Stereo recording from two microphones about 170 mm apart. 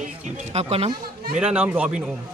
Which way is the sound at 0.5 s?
35° right (ahead or behind).